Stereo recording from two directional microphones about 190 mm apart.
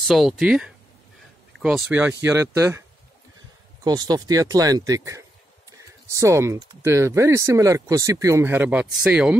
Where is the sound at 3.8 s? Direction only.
20° right (ahead or behind).